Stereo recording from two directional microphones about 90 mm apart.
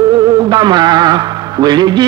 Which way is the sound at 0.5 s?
50° right (ahead or behind).